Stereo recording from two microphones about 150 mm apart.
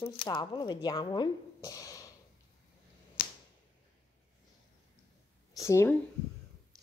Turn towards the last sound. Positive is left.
turn(degrees=20)  # may be behind; listen again after turning